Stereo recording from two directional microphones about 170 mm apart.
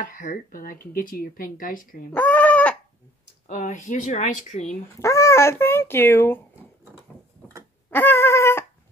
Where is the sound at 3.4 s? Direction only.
45° left (ahead or behind).